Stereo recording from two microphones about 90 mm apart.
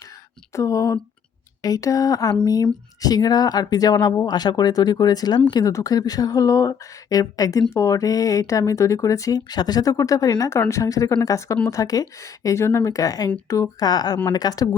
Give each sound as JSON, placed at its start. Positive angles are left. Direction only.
{"t": 0.5, "sound": "speech", "side_deg": 35}